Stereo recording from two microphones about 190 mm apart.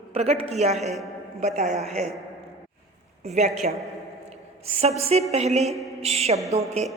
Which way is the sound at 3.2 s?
35° right (ahead or behind).